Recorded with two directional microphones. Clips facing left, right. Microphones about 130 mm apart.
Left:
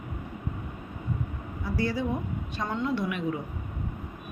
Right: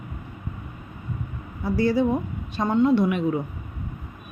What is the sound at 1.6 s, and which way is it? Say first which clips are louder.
A woman's voice: right 8 dB; 25° right (ahead or behind).